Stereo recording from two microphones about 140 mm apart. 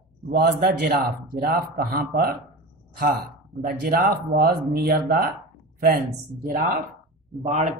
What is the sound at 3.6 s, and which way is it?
Speech, 90° right.